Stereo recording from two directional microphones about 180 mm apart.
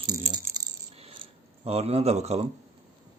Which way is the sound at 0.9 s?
30° right (ahead or behind).